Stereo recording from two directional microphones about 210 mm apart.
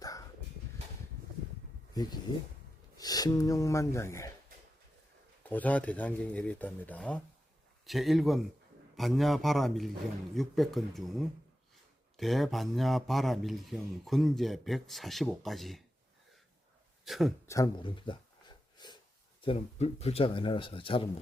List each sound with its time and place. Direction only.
0.0 s a sound: 15° left (ahead or behind)
1.9 s speech: 20° left (ahead or behind)
5.4 s speech: 5° left (ahead or behind)
17.1 s speech: centre (ahead or behind)
17.5 s a sound: 20° left (ahead or behind)
19.4 s speech: 25° left (ahead or behind)